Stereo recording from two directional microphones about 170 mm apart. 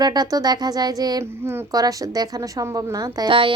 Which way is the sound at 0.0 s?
25° right (ahead or behind).